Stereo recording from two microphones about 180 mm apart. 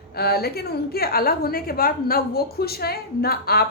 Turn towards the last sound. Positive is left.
turn(degrees=60)  # may be behind; listen again after turning